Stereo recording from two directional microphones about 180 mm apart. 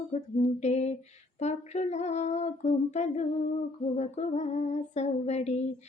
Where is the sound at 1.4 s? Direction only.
40° left (ahead or behind).